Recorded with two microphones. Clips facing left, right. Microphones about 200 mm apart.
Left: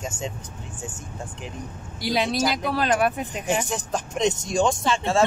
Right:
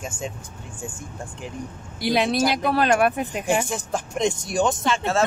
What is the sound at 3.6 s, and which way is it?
Speech, 10° right (ahead or behind).